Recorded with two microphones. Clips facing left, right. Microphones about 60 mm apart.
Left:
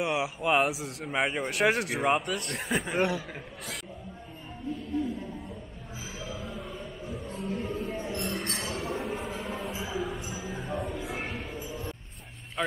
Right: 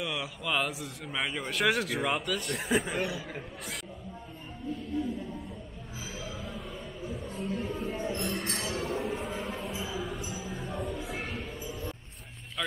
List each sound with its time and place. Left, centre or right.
0.0 s a man's voice: centre
0.4 s a man's voice: left
1.6 s speech: centre
2.0 s speech: left
2.4 s speech: centre
7.1 s a sound: centre
8.2 s chink: centre
9.9 s music: centre
12.6 s vehicle: left